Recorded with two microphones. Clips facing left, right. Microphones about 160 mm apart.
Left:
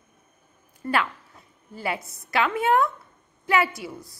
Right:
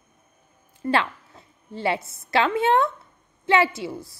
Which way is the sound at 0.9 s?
25° right (ahead or behind).